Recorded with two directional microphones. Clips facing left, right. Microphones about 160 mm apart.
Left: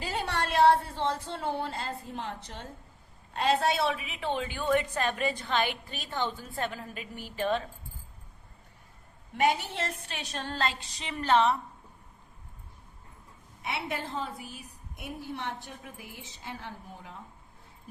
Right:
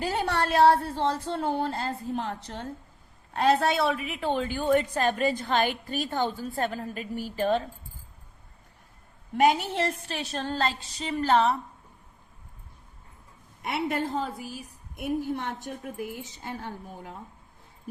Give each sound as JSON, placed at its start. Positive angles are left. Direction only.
{"t": 0.0, "sound": "a woman's voice", "side_deg": -55}
{"t": 9.7, "sound": "a woman's voice", "side_deg": -40}
{"t": 13.6, "sound": "a woman's voice", "side_deg": -50}